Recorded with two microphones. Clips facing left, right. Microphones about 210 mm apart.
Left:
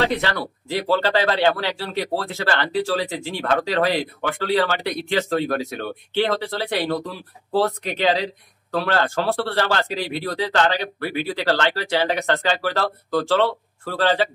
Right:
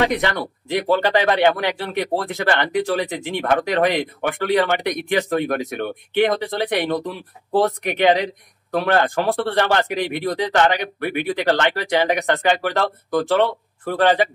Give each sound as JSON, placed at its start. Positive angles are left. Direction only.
{"t": 0.0, "sound": "speech", "side_deg": -15}